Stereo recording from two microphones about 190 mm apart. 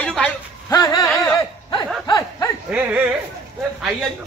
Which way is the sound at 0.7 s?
20° left (ahead or behind).